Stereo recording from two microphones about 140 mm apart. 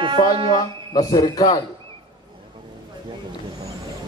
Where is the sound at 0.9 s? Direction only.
25° left (ahead or behind).